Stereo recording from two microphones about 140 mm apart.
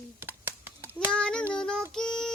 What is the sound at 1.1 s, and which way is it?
Child singing, 5° left (ahead or behind).